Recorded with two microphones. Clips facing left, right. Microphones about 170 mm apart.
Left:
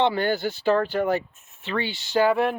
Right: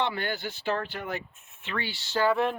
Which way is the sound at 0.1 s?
40° left (ahead or behind).